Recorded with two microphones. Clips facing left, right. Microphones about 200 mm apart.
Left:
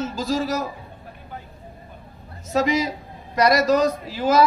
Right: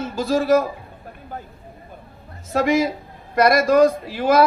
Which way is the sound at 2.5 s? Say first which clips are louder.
Right 3 dB; 50° right (ahead or behind).